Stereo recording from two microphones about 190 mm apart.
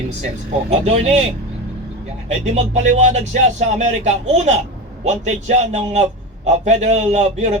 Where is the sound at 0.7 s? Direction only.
35° right (ahead or behind).